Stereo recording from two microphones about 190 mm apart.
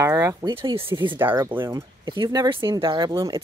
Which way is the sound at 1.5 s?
15° right (ahead or behind).